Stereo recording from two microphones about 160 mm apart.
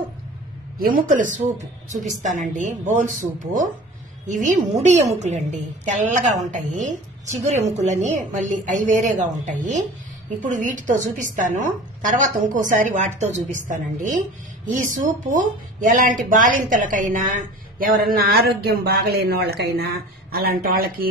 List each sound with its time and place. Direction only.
0.7 s a woman's voice: 65° right (ahead or behind)